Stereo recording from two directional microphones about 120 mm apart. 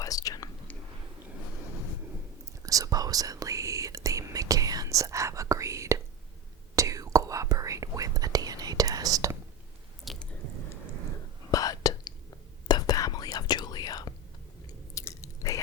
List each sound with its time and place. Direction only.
0.0 s whispering: 30° left (ahead or behind)
2.6 s whispering: 30° right (ahead or behind)
10.0 s squish: centre (ahead or behind)
11.5 s whispering: 30° left (ahead or behind)
14.9 s biting: 25° left (ahead or behind)